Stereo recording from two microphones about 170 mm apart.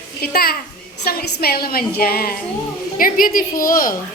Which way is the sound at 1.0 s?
65° left (ahead or behind).